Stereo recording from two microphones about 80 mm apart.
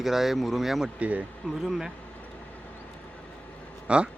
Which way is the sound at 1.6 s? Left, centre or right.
Centre.